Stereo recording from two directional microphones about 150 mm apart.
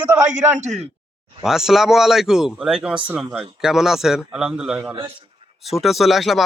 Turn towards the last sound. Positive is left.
turn(degrees=0)  # may be behind; listen again after turning